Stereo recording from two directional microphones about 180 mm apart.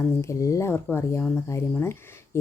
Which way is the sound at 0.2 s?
15° left (ahead or behind).